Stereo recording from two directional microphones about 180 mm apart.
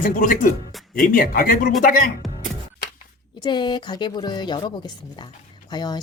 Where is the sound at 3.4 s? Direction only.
25° left (ahead or behind).